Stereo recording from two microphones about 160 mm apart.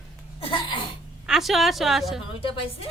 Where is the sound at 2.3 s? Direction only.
35° left (ahead or behind).